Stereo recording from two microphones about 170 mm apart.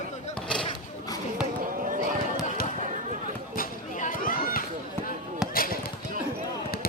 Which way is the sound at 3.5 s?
50° left (ahead or behind).